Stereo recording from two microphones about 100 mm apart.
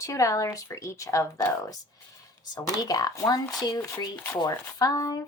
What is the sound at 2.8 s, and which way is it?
Speech, 35° left (ahead or behind).